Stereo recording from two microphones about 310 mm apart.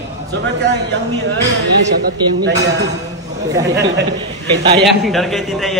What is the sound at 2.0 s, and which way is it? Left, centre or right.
Speech, right.